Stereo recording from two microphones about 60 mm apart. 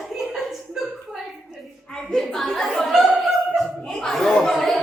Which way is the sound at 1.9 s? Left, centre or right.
Centre.